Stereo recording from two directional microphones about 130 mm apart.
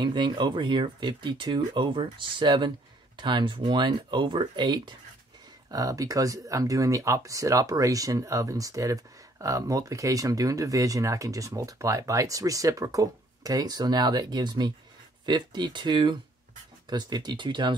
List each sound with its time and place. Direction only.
0.0 s speech: 35° right (ahead or behind)